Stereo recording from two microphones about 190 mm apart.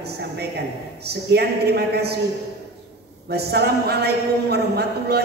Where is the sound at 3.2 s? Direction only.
60° right (ahead or behind).